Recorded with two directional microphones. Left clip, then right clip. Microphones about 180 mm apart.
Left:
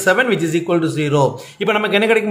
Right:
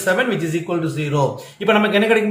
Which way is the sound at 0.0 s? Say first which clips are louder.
Left 4 dB; 35° left (ahead or behind).